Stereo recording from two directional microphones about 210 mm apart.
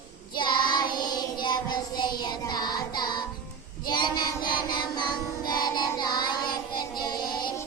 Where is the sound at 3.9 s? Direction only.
20° left (ahead or behind).